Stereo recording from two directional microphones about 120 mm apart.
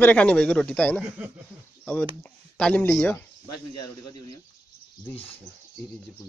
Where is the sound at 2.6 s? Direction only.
10° left (ahead or behind).